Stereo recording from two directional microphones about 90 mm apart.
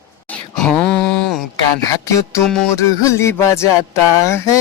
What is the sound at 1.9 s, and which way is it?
Music, 40° left (ahead or behind).